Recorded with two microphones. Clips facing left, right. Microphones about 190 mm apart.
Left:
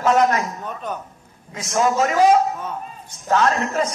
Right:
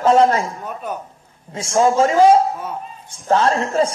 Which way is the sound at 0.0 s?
30° right (ahead or behind).